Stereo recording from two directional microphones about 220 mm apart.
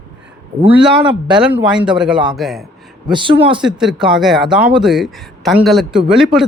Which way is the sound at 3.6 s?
5° right (ahead or behind).